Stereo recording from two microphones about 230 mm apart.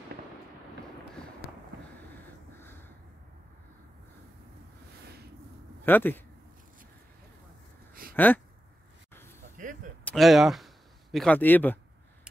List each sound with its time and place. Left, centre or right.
5.9 s speech: centre
7.9 s a sound: right
10.0 s speech: centre